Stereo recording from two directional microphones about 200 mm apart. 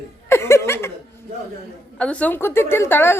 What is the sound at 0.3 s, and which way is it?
Chuckle, 15° left (ahead or behind).